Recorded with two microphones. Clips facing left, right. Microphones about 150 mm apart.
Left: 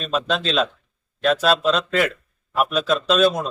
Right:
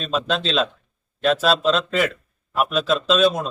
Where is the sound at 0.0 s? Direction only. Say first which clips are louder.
Even; centre (ahead or behind).